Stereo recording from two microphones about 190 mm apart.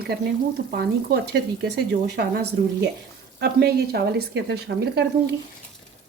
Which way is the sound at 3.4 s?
55° right (ahead or behind).